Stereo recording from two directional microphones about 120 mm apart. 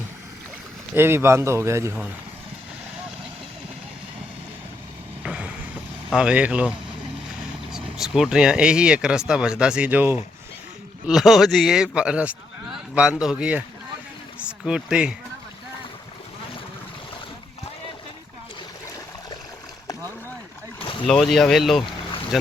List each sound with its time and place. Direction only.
0.9 s a man's voice: 20° right (ahead or behind)
5.2 s a sound: 10° right (ahead or behind)
6.1 s a man's voice: 10° right (ahead or behind)
11.0 s a man's voice: 5° right (ahead or behind)
21.1 s speech: 5° left (ahead or behind)